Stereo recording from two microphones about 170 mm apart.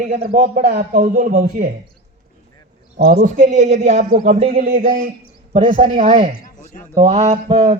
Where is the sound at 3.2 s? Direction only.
45° right (ahead or behind).